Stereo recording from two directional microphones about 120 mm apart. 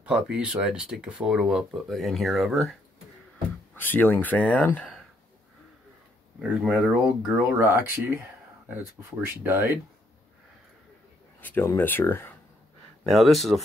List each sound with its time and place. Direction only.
0.0 s speech: 10° right (ahead or behind)
3.7 s speech: 15° left (ahead or behind)
6.4 s speech: 10° right (ahead or behind)
7.1 s speech: 20° right (ahead or behind)
9.2 s speech: 20° right (ahead or behind)
11.4 s speech: 20° left (ahead or behind)
13.0 s speech: centre (ahead or behind)